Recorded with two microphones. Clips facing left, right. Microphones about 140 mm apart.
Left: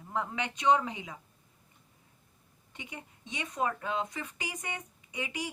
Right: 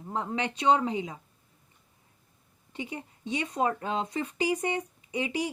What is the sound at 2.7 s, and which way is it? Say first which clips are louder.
A woman's voice: right 8 dB; 30° right (ahead or behind).